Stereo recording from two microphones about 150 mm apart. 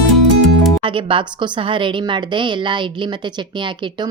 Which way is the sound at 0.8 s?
35° right (ahead or behind).